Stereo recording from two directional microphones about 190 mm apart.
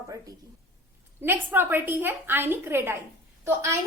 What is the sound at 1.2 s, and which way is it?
A woman's voice, 10° right (ahead or behind).